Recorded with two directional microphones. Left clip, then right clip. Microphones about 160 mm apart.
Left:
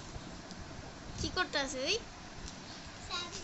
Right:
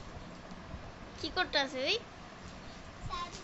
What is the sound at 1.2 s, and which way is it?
Speech, 5° right (ahead or behind).